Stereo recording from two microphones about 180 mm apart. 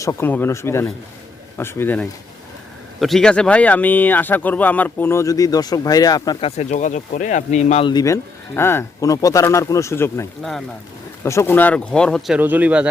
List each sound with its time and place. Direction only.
0.0 s speech: 15° left (ahead or behind)
6.4 s speech: 40° left (ahead or behind)
7.9 s speech: 20° left (ahead or behind); by 12.9 s 5° right (ahead or behind)